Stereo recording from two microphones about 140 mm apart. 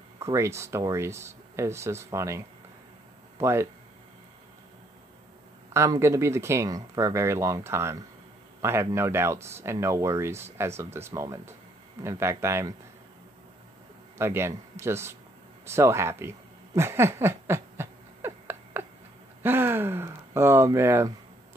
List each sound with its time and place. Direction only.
0.2 s speech: 20° right (ahead or behind)
5.7 s speech: 20° right (ahead or behind)
14.1 s speech: 15° right (ahead or behind)
16.7 s a sound: 20° right (ahead or behind)
19.4 s speech: 15° right (ahead or behind)